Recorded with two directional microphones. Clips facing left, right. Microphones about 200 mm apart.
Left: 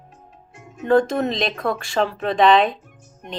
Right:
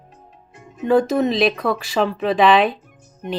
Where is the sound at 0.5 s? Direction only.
Centre (ahead or behind).